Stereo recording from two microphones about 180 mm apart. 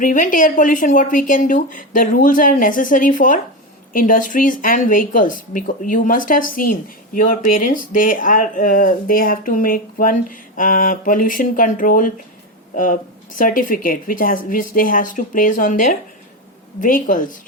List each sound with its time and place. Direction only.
0.0 s speech: 50° left (ahead or behind)